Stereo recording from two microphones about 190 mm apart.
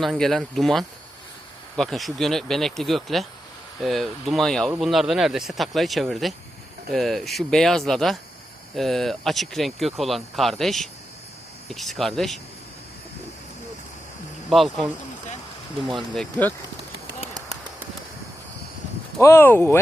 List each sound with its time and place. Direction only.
0.0 s speech: centre (ahead or behind)
14.5 s speech: centre (ahead or behind)
15.9 s speech: centre (ahead or behind)
17.1 s bird: 15° right (ahead or behind)
19.2 s speech: 15° left (ahead or behind)